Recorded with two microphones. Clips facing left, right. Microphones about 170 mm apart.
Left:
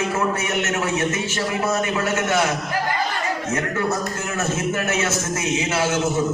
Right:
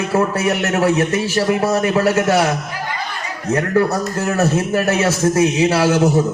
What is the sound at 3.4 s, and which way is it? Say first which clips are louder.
A man's voice: right 11 dB; 35° right (ahead or behind).